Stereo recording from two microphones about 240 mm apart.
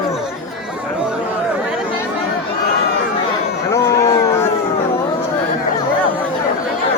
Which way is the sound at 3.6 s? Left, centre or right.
Centre.